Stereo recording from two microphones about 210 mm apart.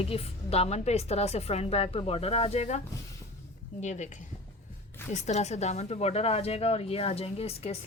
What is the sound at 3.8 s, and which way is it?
Speech, 35° left (ahead or behind).